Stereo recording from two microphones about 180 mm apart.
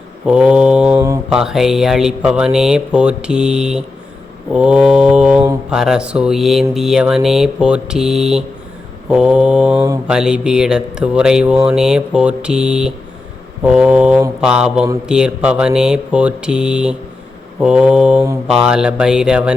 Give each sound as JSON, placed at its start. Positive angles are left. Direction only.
{"t": 0.3, "sound": "speech", "side_deg": -5}
{"t": 0.9, "sound": "mantra", "side_deg": -15}
{"t": 1.3, "sound": "speech", "side_deg": -5}